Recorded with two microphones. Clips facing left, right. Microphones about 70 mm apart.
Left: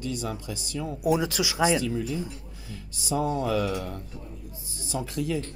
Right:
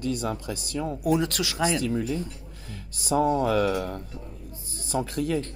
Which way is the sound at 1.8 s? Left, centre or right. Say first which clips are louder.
Right 2 dB; right.